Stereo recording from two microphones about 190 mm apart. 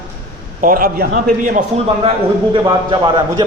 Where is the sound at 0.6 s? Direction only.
45° right (ahead or behind).